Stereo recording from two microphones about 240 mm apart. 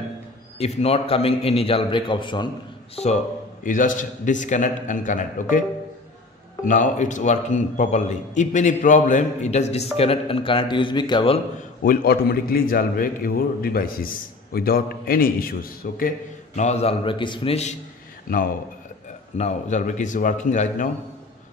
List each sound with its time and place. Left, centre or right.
0.6 s a man's voice: left
6.6 s a man's voice: left
18.3 s a man's voice: left